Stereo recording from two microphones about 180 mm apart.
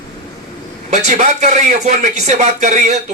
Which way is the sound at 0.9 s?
40° right (ahead or behind).